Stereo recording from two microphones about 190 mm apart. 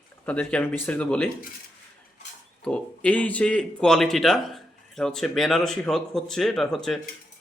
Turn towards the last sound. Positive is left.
turn(degrees=0)  # may be behind; listen again after turning